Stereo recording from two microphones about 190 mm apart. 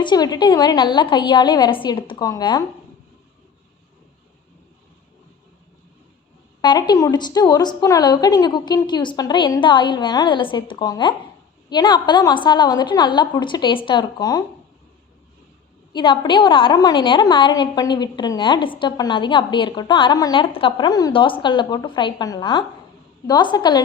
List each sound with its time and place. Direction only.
0.0 s a woman's voice: 20° left (ahead or behind)
6.6 s a woman's voice: 25° left (ahead or behind)
15.9 s a woman's voice: 25° left (ahead or behind)